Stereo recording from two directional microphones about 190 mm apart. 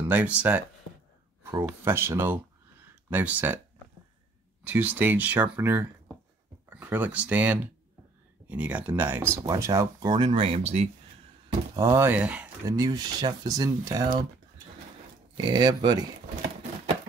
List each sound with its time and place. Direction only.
0.1 s speech: 5° right (ahead or behind)
4.6 s speech: 10° right (ahead or behind); by 10.9 s 35° right (ahead or behind)
11.7 s speech: 15° right (ahead or behind)
12.6 s speech: 20° right (ahead or behind)
15.5 s speech: 25° right (ahead or behind)